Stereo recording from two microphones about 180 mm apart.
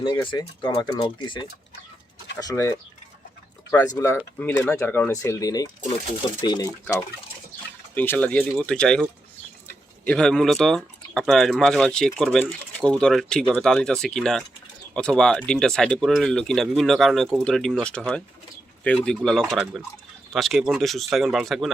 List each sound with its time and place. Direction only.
0.3 s speech: 25° left (ahead or behind)
2.4 s speech: 20° left (ahead or behind)
7.9 s speech: 10° left (ahead or behind)